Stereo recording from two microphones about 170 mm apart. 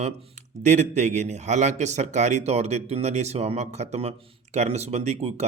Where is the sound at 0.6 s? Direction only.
40° right (ahead or behind).